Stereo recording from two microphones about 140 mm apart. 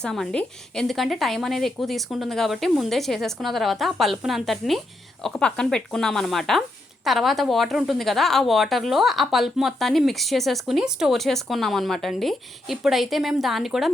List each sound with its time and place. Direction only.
0.0 s speech: 5° left (ahead or behind)